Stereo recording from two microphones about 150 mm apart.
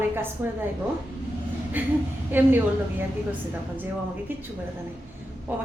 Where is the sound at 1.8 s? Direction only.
10° right (ahead or behind).